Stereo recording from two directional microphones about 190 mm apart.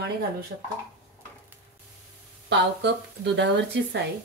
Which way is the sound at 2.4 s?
70° right (ahead or behind).